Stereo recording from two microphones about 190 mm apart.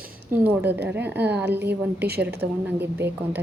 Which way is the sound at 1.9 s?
55° right (ahead or behind).